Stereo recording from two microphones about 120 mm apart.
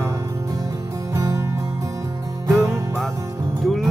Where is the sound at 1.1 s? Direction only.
25° right (ahead or behind).